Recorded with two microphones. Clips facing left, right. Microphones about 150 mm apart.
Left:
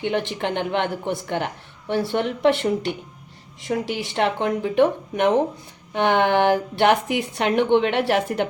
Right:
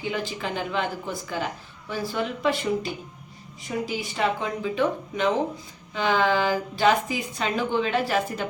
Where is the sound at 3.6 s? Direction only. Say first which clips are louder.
Left 4 dB; 85° left.